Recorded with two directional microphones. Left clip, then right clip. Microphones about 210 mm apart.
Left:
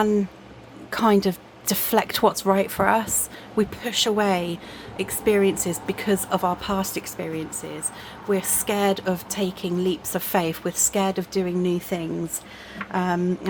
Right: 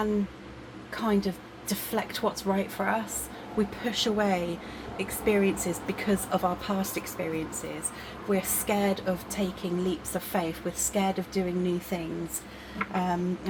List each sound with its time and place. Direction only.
0.9 s speech: 50° left (ahead or behind)